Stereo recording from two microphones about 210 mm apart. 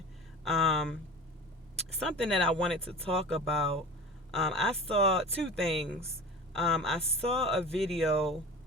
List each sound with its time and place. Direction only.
0.4 s a sound: centre (ahead or behind)
2.0 s speech: 5° left (ahead or behind)
2.8 s speech: 25° right (ahead or behind)
3.2 s speech: 5° left (ahead or behind)